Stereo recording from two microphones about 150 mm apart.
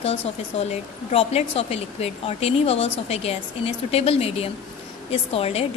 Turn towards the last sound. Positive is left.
turn(degrees=40)  # may be behind; listen again after turning